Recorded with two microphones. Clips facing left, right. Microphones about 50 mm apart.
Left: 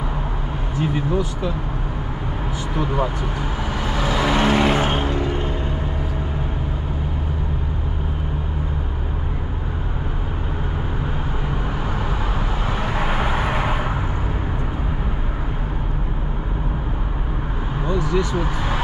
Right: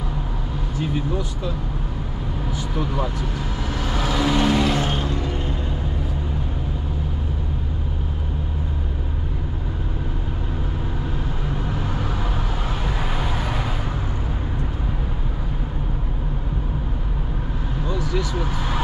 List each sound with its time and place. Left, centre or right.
0.7 s speech: centre
2.7 s vehicle: left
12.6 s vehicle: left
18.0 s vehicle: centre
18.3 s speech: left